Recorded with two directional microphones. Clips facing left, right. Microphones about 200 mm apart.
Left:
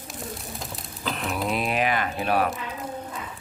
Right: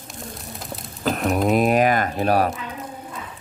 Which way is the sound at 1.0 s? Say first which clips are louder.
Right 8 dB; 45° right (ahead or behind).